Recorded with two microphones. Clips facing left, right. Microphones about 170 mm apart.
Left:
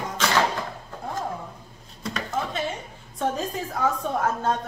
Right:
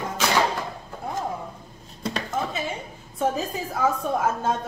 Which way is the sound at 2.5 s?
5° right (ahead or behind).